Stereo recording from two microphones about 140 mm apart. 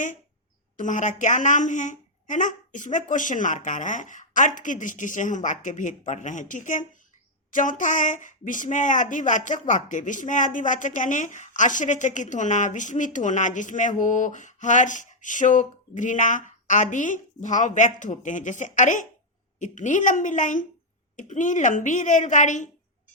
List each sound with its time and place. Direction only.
0.8 s a woman's voice: 65° left (ahead or behind)